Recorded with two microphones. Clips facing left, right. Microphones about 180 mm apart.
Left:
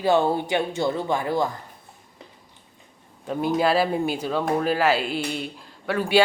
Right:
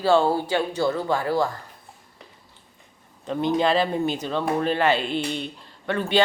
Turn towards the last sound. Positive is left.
turn(degrees=5)  # may be behind; listen again after turning